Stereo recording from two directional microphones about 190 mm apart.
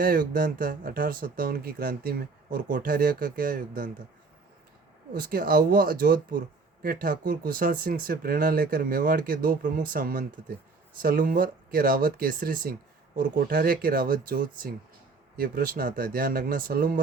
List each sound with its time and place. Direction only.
0.0 s speech: 50° right (ahead or behind)
5.1 s speech: 50° right (ahead or behind)